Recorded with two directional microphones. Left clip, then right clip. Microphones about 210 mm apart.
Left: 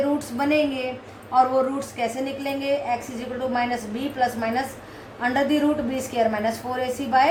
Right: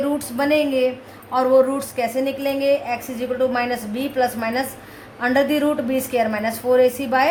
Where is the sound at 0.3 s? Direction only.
50° right (ahead or behind).